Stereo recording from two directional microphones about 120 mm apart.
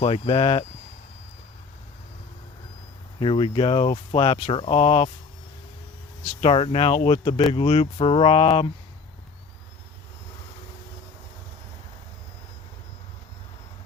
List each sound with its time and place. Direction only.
0.0 s speech: 50° left (ahead or behind)
3.2 s speech: 50° left (ahead or behind)
6.4 s speech: 50° left (ahead or behind)